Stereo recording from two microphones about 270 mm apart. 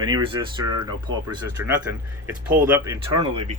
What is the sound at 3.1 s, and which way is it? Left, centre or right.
Speech, right.